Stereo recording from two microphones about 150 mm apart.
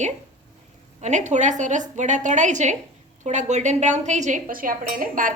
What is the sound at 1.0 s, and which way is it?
A woman's voice, 50° right (ahead or behind).